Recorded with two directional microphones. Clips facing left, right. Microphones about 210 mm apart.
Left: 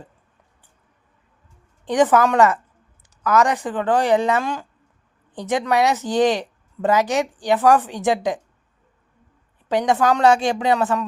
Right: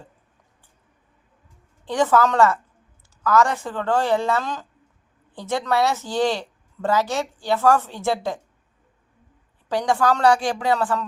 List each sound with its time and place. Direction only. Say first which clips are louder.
1.8 s a woman's voice: left 3 dB; 15° left (ahead or behind)
9.6 s a woman's voice: left 2 dB; 20° left (ahead or behind)